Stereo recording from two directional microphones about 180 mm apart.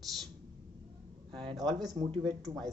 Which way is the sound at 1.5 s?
Centre (ahead or behind).